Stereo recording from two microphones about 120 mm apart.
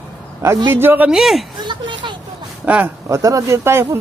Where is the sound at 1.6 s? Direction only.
40° right (ahead or behind).